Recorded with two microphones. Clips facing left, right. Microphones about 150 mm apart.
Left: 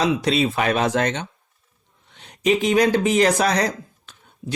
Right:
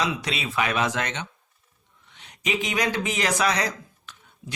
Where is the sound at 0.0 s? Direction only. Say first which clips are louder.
Left 8 dB; 35° left (ahead or behind).